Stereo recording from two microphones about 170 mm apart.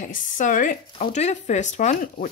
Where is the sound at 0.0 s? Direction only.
50° left (ahead or behind).